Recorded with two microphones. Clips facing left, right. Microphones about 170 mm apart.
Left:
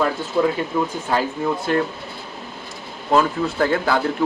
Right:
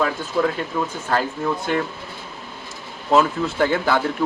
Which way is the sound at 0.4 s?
20° left (ahead or behind).